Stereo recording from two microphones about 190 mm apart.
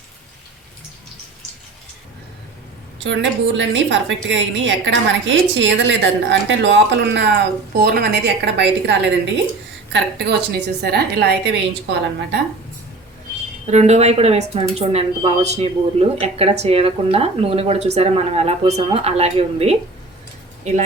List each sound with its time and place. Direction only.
3.0 s a woman's voice: 75° right (ahead or behind)
13.7 s a woman's voice: 35° right (ahead or behind)